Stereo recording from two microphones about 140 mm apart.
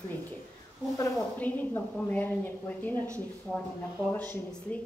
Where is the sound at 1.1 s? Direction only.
10° left (ahead or behind).